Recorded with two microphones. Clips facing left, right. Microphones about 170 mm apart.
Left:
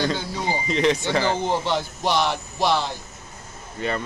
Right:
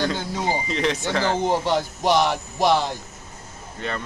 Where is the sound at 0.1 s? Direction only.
Centre (ahead or behind).